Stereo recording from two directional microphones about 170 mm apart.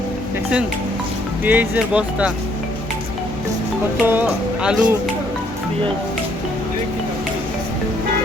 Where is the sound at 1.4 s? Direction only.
10° right (ahead or behind).